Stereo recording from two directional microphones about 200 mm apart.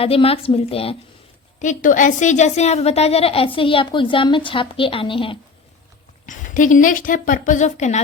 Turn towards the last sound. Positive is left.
turn(degrees=35)  # may be behind; listen again after turning